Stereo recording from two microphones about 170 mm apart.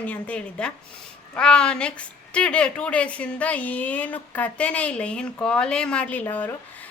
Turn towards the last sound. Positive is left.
turn(degrees=10)  # may be behind; listen again after turning